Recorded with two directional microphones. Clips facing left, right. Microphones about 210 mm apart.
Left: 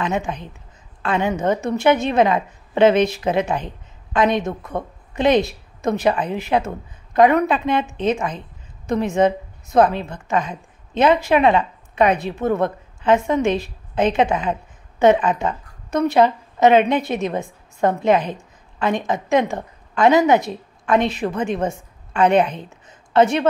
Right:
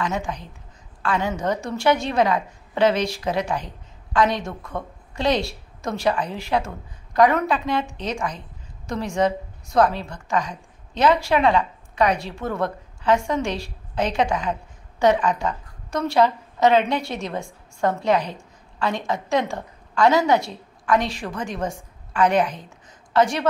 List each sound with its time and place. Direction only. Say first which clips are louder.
0.0 s a woman's voice: left 3 dB; 20° left (ahead or behind)
22.5 s a woman's voice: left 4 dB; 60° left (ahead or behind)
23.1 s a woman's voice: left 4 dB; 20° left (ahead or behind)